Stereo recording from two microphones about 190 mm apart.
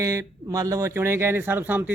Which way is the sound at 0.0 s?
15° right (ahead or behind).